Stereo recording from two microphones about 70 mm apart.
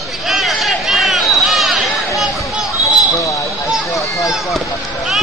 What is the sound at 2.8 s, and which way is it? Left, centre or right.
Basketball bounce, left.